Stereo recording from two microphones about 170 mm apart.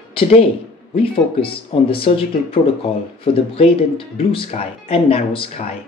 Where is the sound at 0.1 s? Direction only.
35° left (ahead or behind).